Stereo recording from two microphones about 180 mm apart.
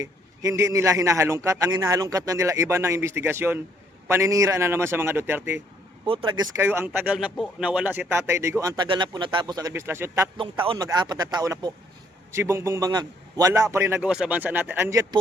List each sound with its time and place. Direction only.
0.0 s a man's voice: 15° right (ahead or behind)
6.1 s a man's voice: 25° right (ahead or behind)
10.3 s a man's voice: 30° right (ahead or behind)